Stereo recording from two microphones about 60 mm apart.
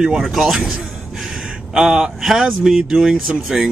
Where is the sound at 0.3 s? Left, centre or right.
Centre.